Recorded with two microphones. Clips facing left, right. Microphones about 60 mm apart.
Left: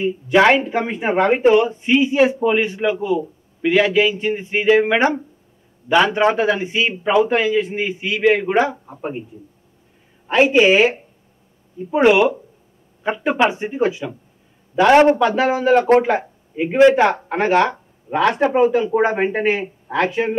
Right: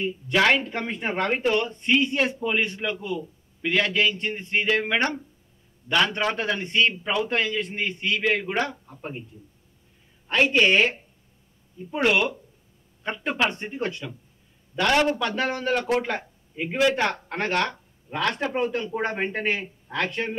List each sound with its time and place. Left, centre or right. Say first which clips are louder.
0.0 s speech: left 8 dB; centre
8.7 s speech: left 9 dB; left
10.2 s speech: left 7 dB; centre
14.9 s speech: left 10 dB; left
15.2 s speech: left 9 dB; centre